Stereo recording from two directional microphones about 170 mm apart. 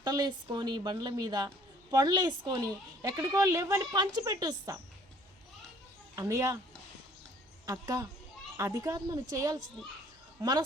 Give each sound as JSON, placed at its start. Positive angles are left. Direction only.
{"t": 0.0, "sound": "speech", "side_deg": -25}
{"t": 6.1, "sound": "speech", "side_deg": -20}
{"t": 7.7, "sound": "speech", "side_deg": -20}